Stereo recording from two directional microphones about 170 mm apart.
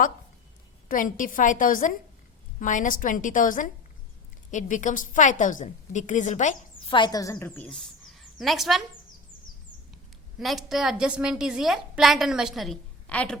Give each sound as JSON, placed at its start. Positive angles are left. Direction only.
{"t": 0.9, "sound": "a woman's voice", "side_deg": 50}
{"t": 6.8, "sound": "a woman's voice", "side_deg": 30}
{"t": 10.3, "sound": "a woman's voice", "side_deg": 0}